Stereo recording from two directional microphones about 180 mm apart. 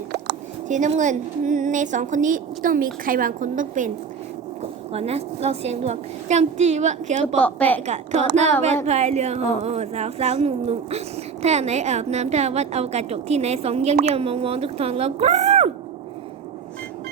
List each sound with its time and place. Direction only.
0.7 s a woman's voice: 45° right (ahead or behind)
4.6 s a woman's voice: 35° right (ahead or behind)
7.3 s a woman's voice: 10° left (ahead or behind)
7.9 s a woman's voice: 40° right (ahead or behind)